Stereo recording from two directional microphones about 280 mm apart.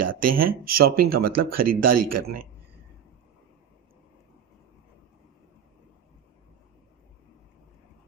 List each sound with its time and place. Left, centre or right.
0.0 s speech: right